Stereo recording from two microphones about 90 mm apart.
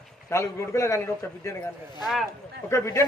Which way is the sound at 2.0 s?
Centre (ahead or behind).